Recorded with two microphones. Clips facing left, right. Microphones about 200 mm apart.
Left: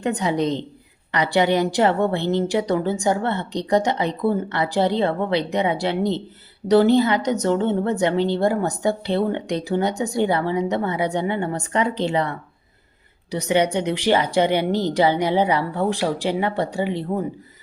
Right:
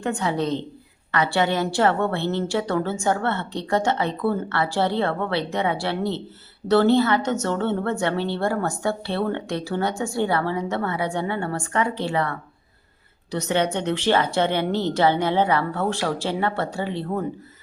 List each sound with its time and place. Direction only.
0.0 s a woman's voice: 20° left (ahead or behind)